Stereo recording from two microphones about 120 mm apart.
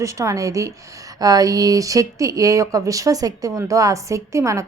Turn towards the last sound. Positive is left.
turn(degrees=-25)  # may be behind; listen again after turning